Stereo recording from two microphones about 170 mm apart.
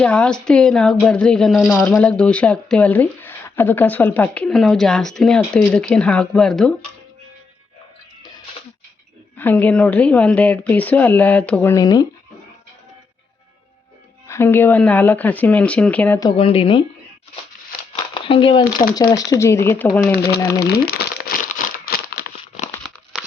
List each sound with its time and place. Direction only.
0.0 s speech: 5° left (ahead or behind)
9.4 s a woman's voice: 10° left (ahead or behind)
11.7 s speech: 20° left (ahead or behind)
14.3 s a woman's voice: 15° left (ahead or behind)
16.2 s a woman's voice: 30° left (ahead or behind)
17.9 s a sound: 30° left (ahead or behind)
19.1 s a woman's voice: 20° left (ahead or behind)
20.6 s crumpling: 70° left (ahead or behind)
21.8 s a sound: 65° left (ahead or behind)